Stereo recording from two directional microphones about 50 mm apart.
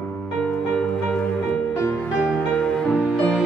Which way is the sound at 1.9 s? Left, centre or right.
Left.